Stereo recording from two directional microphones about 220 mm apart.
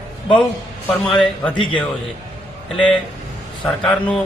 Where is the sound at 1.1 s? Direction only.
Centre (ahead or behind).